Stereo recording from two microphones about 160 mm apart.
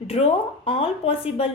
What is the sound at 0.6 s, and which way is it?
Speech, 35° left (ahead or behind).